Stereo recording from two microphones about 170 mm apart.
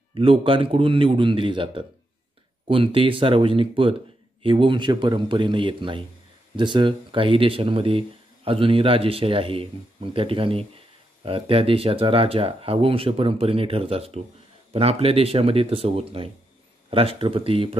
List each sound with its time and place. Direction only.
0.1 s a man's voice: 30° right (ahead or behind)